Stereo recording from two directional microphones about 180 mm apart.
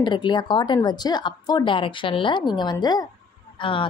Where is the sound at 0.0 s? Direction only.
25° left (ahead or behind).